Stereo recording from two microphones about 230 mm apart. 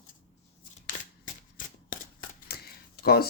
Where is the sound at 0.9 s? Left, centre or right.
Left.